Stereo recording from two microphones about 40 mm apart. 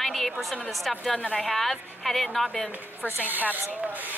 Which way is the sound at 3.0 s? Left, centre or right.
Right.